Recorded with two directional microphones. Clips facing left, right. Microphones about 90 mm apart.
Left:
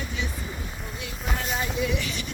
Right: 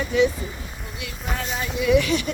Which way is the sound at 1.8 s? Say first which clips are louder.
Right 9 dB; 80° right.